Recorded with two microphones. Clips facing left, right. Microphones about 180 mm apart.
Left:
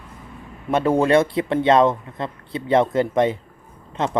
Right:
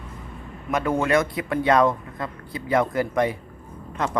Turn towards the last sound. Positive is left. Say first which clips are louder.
# left 3 dB
turn(degrees=25)  # may be behind; listen again after turning